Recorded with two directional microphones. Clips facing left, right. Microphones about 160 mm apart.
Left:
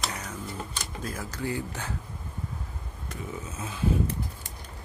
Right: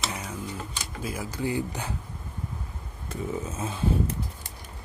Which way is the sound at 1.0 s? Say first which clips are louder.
Right 3 dB; 10° right (ahead or behind).